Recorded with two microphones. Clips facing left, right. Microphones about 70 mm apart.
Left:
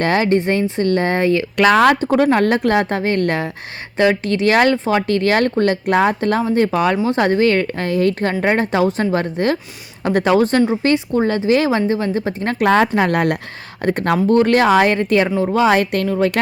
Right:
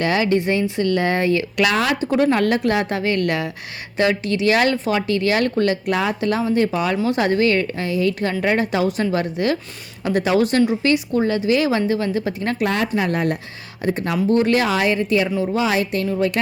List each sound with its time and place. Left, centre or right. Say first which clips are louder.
0.0 s speech: left 3 dB; left
7.0 s speech: left 3 dB; left
13.1 s speech: left 4 dB; left
16.1 s speech: left 3 dB; left